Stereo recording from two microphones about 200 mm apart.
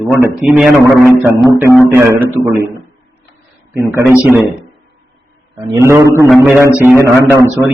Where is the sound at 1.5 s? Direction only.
15° right (ahead or behind).